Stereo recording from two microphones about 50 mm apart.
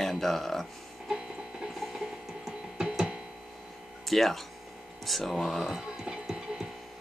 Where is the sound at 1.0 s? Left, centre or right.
Centre.